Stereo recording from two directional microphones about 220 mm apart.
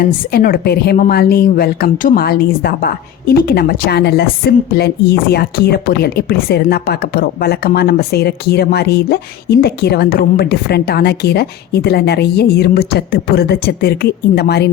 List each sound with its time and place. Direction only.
0.0 s a woman's voice: 40° left (ahead or behind)